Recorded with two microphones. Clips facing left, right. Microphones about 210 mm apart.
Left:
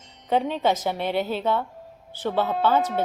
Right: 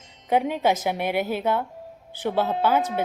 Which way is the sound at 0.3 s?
10° right (ahead or behind).